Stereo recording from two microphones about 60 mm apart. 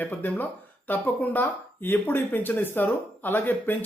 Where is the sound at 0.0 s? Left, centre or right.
Left.